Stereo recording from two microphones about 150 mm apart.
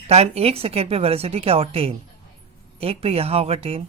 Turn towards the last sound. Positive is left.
turn(degrees=-40)  # may be behind; listen again after turning